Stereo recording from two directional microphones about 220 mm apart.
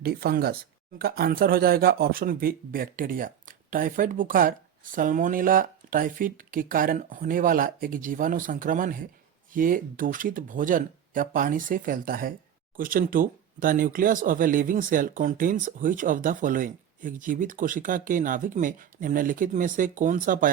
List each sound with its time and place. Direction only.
0.0 s speech: 45° right (ahead or behind)